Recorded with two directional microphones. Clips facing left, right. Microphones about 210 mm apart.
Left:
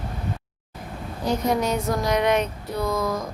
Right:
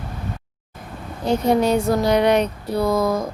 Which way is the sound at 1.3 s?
30° right (ahead or behind).